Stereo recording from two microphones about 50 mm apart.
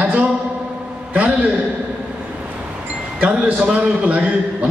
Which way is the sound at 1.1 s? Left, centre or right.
Right.